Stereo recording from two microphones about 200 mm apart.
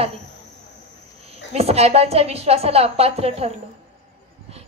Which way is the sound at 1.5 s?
30° right (ahead or behind).